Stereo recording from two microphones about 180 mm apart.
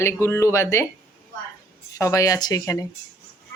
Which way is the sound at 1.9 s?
15° left (ahead or behind).